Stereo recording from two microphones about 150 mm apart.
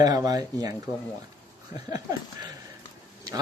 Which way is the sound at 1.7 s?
25° right (ahead or behind).